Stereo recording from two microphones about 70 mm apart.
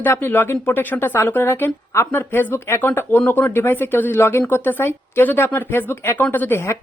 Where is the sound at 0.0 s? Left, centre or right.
Left.